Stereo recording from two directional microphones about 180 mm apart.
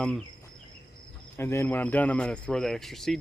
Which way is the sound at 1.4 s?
15° left (ahead or behind).